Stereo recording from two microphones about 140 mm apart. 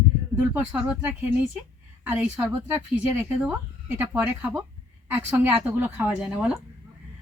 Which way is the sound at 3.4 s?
10° right (ahead or behind).